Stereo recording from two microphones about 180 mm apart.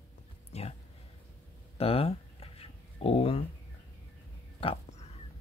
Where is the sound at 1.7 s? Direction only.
30° left (ahead or behind).